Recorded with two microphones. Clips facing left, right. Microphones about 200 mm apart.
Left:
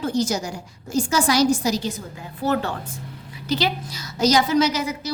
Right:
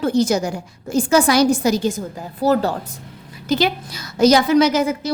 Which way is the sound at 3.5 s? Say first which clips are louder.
Right 5 dB; 50° right (ahead or behind).